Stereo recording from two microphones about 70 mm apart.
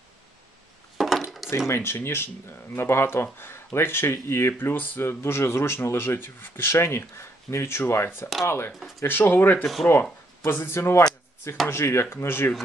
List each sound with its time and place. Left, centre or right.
0.9 s dishes: centre
1.7 s speech: left